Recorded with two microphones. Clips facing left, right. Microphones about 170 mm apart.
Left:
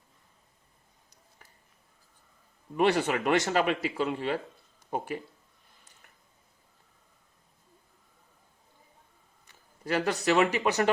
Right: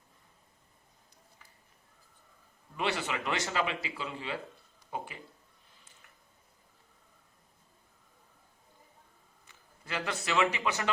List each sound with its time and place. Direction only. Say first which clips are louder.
2.7 s speech: left 8 dB; 50° left (ahead or behind)
9.8 s speech: left 9 dB; 40° left (ahead or behind)